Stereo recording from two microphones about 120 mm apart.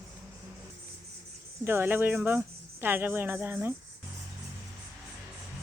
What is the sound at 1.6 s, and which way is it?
Speech, 20° right (ahead or behind).